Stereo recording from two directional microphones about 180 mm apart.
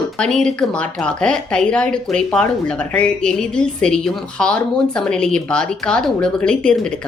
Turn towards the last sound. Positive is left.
turn(degrees=5)  # may be behind; listen again after turning